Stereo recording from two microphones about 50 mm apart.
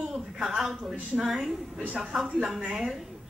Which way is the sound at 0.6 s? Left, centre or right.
Centre.